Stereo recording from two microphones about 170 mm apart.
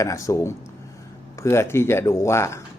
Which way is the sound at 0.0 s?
20° left (ahead or behind).